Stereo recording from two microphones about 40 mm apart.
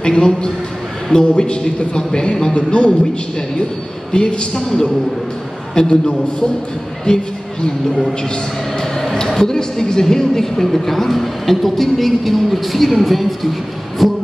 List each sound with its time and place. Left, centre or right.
0.0 s a man's voice: centre
9.1 s a woman's voice: centre